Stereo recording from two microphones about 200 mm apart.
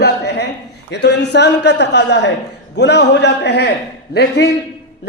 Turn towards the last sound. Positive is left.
turn(degrees=60)  # may be behind; listen again after turning